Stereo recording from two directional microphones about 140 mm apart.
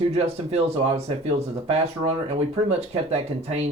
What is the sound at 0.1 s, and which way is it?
Speech, 50° right (ahead or behind).